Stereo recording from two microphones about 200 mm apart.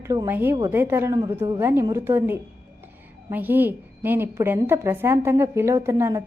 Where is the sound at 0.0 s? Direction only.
15° right (ahead or behind).